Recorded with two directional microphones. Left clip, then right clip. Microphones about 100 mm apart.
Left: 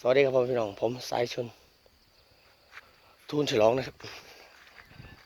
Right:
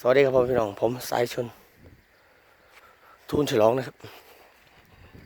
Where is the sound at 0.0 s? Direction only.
90° right.